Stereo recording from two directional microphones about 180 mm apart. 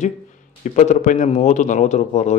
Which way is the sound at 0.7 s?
45° left (ahead or behind).